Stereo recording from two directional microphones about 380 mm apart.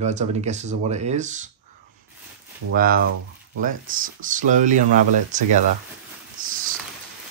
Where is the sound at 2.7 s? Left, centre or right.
Right.